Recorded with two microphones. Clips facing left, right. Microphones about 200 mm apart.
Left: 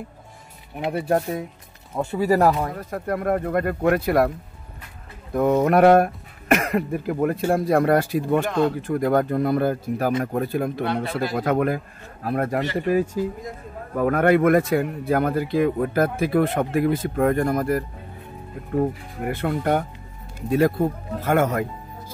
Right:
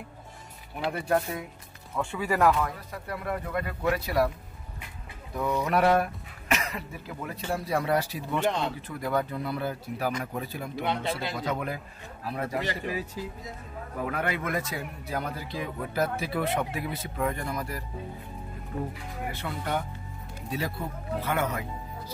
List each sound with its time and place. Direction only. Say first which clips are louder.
0.9 s speech: left 6 dB; 35° left (ahead or behind)
2.7 s a man's voice: left 10 dB; 50° left (ahead or behind)
5.3 s a man's voice: left 9 dB; 55° left (ahead or behind)